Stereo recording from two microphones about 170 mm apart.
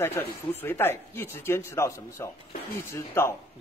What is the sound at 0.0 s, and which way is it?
Speech, 15° left (ahead or behind).